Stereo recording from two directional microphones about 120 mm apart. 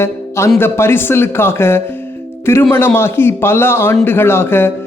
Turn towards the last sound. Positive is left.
turn(degrees=20)  # may be behind; listen again after turning